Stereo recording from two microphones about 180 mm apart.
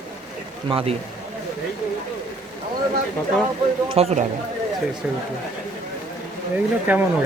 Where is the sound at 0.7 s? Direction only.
30° right (ahead or behind).